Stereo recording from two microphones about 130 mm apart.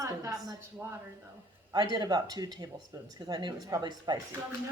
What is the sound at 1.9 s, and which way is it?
A woman's voice, 30° right (ahead or behind).